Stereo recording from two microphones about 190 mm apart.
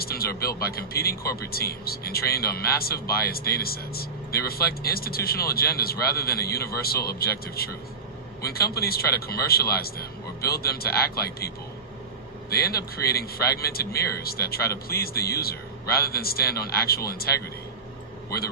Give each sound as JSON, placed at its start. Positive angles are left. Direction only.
{"t": 0.0, "sound": "speech", "side_deg": 50}
{"t": 18.3, "sound": "a man's voice", "side_deg": 55}